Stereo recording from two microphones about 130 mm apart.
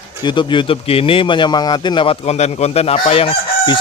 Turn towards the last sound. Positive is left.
turn(degrees=50)  # may be behind; listen again after turning